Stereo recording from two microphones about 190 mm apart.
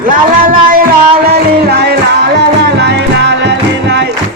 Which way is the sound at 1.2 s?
55° right (ahead or behind).